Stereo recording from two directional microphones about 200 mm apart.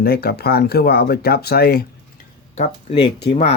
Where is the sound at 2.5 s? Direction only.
30° left (ahead or behind).